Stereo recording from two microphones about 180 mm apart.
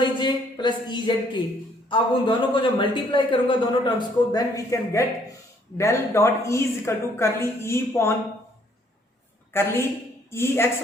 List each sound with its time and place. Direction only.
0.0 s a man's voice: 25° left (ahead or behind)
9.5 s a woman's voice: 10° left (ahead or behind)